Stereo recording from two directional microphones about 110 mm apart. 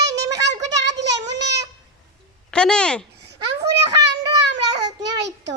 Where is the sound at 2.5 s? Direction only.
10° left (ahead or behind).